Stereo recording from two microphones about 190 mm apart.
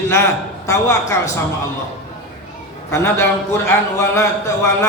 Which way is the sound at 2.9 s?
15° left (ahead or behind).